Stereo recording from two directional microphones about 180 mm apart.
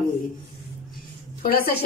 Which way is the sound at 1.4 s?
55° left (ahead or behind).